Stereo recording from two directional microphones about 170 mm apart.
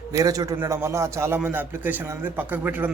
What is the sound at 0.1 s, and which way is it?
A man's voice, 20° right (ahead or behind).